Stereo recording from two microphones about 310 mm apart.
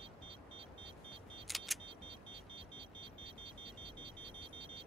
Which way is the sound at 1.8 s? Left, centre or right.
Centre.